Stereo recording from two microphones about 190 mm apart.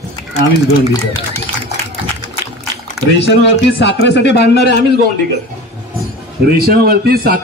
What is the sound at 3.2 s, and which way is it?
Speech, 65° left (ahead or behind).